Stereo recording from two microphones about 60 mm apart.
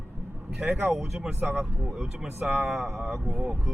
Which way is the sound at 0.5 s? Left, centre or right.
Right.